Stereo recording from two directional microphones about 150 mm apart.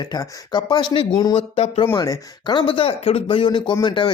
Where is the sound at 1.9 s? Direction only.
25° left (ahead or behind).